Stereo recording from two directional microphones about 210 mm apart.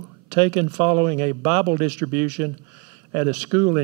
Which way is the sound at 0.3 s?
15° right (ahead or behind).